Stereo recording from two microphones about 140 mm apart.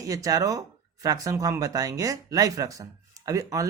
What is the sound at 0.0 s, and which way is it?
Speech, 25° right (ahead or behind).